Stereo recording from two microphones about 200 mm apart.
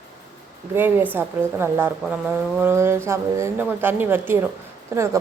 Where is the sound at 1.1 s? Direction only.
10° right (ahead or behind).